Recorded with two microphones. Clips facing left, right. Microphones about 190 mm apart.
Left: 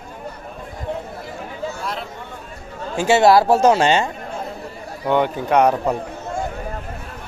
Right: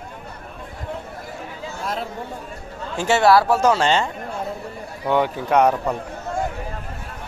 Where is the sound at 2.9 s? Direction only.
15° left (ahead or behind).